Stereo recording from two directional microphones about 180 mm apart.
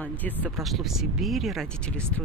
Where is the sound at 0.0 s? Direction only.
10° left (ahead or behind).